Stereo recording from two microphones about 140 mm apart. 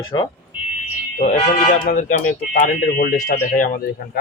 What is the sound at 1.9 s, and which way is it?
Speech, 70° left (ahead or behind).